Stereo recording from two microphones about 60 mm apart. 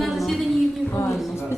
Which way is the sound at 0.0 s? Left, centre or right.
Centre.